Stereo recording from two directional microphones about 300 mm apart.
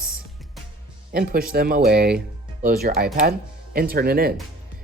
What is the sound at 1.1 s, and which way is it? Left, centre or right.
Speech, right.